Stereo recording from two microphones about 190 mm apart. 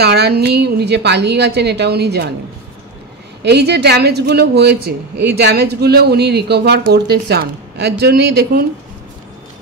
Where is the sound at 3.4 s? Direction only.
60° right (ahead or behind).